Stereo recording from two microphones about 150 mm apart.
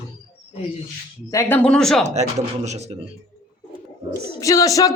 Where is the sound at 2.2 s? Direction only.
50° right (ahead or behind).